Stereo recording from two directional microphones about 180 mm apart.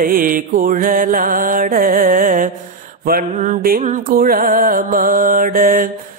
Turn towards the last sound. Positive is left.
turn(degrees=-50)  # may be behind; listen again after turning